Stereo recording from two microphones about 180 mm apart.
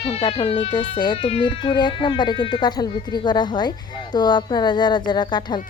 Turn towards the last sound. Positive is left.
turn(degrees=25)  # may be behind; listen again after turning